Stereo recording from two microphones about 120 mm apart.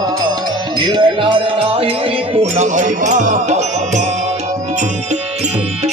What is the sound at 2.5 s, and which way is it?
Music, 85° right.